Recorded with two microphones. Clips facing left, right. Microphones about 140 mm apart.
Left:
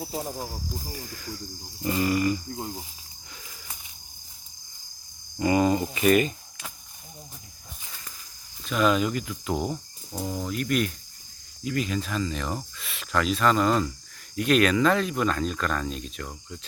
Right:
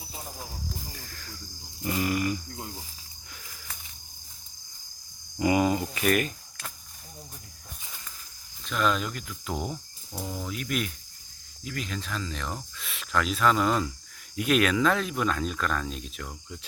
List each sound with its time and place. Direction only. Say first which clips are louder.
0.1 s speech: left 9 dB; 40° left (ahead or behind)
0.9 s cricket: left 6 dB; 10° left (ahead or behind)
1.8 s cricket: left 3 dB; 5° right (ahead or behind)
2.6 s speech: left 5 dB; 25° left (ahead or behind)
5.4 s cricket: left 2 dB; 10° right (ahead or behind)
5.8 s speech: left 5 dB; 5° left (ahead or behind)
8.6 s cricket: left 4 dB; 5° left (ahead or behind)